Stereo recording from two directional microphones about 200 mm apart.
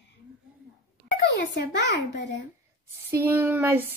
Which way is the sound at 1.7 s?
60° left (ahead or behind).